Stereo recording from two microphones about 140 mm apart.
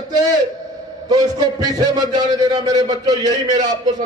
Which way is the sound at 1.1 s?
30° right (ahead or behind).